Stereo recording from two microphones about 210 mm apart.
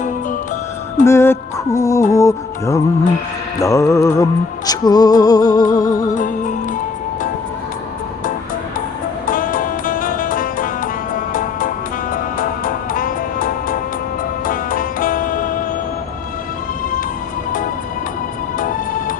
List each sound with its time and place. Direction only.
1.0 s music: 10° left (ahead or behind)
5.6 s music: 40° left (ahead or behind)
9.2 s music: 40° left (ahead or behind)
12.1 s music: 40° left (ahead or behind)
18.6 s music: 40° left (ahead or behind)